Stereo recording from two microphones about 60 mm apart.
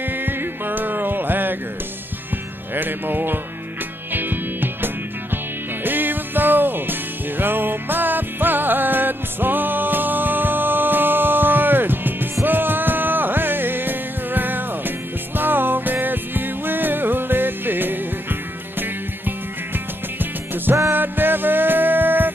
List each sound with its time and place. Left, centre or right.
0.0 s music: right
2.7 s music: right